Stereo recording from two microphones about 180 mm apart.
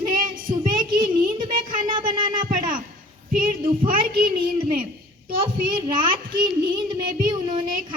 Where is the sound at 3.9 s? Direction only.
55° right (ahead or behind).